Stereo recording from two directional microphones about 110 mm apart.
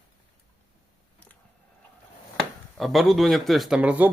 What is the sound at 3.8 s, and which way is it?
Speech, 15° right (ahead or behind).